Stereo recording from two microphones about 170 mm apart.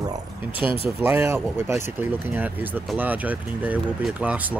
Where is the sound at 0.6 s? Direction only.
30° left (ahead or behind).